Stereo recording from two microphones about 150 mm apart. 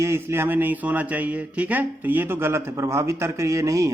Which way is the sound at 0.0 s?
15° right (ahead or behind).